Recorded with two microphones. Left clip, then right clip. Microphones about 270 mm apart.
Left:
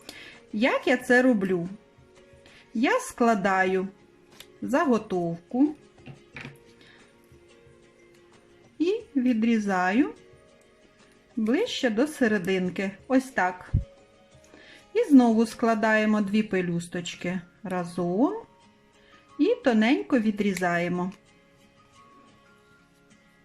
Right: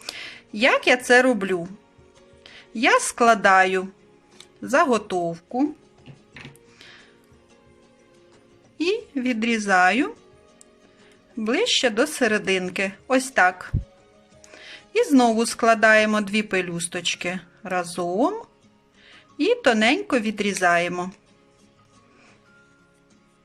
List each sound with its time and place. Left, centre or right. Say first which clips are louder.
0.0 s speech: right 9 dB; right
8.8 s a woman's voice: right 2 dB; right
11.4 s speech: right 5 dB; right
19.4 s speech: right 4 dB; right